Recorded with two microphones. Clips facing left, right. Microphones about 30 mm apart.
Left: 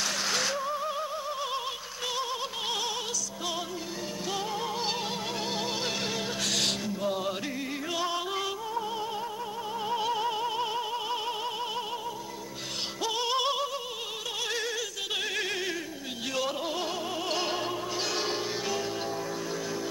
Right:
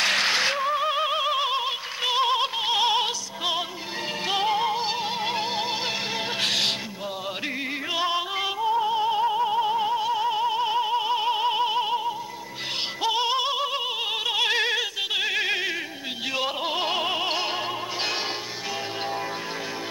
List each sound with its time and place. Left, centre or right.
0.0 s music: right
2.0 s music: right
5.2 s opera: right
6.4 s music: right
7.9 s music: right
9.8 s opera: centre; by 12.0 s right
13.0 s synthetic singing: right
14.3 s opera: right
15.1 s music: right
16.3 s opera: right
17.3 s music: right